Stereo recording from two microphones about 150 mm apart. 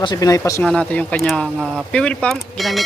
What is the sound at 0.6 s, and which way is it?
Speech, 5° left (ahead or behind).